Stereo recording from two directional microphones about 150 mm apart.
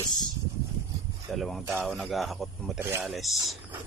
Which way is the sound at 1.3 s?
Centre (ahead or behind).